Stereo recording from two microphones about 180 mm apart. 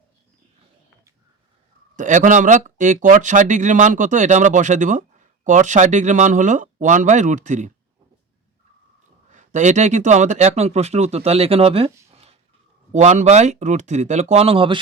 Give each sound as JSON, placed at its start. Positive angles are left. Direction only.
{"t": 2.0, "sound": "speech", "side_deg": -45}
{"t": 9.3, "sound": "speech", "side_deg": -40}